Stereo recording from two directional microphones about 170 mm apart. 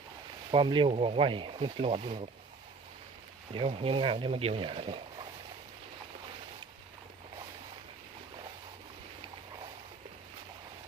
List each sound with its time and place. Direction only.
0.5 s speech: 30° right (ahead or behind)
3.5 s speech: 30° right (ahead or behind)